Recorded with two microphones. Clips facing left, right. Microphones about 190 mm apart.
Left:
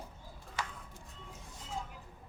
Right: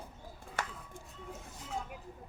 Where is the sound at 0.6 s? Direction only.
50° right (ahead or behind).